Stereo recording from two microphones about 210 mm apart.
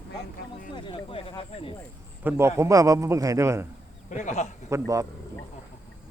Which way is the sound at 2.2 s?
15° right (ahead or behind).